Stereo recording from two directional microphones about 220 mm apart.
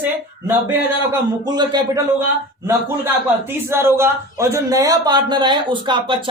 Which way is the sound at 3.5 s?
10° right (ahead or behind).